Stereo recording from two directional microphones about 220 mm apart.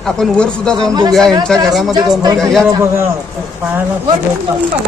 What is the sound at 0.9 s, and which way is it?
Speech, 20° right (ahead or behind).